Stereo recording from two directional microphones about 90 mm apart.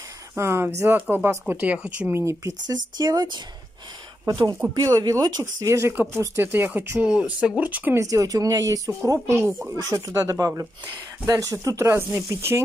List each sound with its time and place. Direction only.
0.4 s speech: 30° right (ahead or behind)
0.9 s speech: 15° right (ahead or behind)
2.1 s speech: 35° right (ahead or behind)
2.6 s speech: 50° right (ahead or behind)
4.7 s speech: 45° right (ahead or behind); by 8.0 s 20° right (ahead or behind)
8.0 s speech: 40° right (ahead or behind)